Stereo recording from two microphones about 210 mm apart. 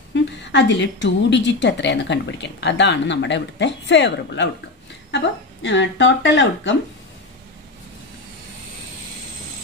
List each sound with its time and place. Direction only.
0.1 s a woman's voice: 60° left (ahead or behind)